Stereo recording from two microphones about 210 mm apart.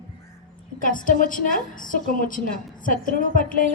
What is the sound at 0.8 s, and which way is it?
A woman's voice, 40° left (ahead or behind).